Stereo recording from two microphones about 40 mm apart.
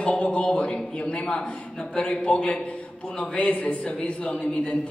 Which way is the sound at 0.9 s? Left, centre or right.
Left.